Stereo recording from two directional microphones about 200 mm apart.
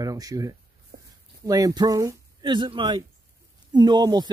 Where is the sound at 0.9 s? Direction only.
55° right (ahead or behind).